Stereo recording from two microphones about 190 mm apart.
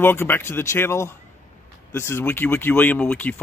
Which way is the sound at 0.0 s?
10° left (ahead or behind).